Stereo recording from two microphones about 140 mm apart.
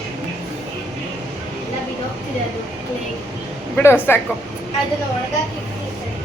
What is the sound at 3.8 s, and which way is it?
Speech, 15° left (ahead or behind).